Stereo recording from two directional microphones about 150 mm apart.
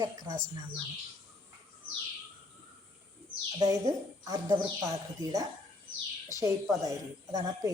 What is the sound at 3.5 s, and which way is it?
A woman's voice, 20° right (ahead or behind).